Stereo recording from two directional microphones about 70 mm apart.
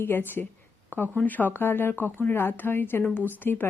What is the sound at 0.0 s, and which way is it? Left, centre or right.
Speech, left.